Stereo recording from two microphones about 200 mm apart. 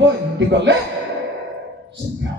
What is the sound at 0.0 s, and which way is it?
Speech, 60° right (ahead or behind).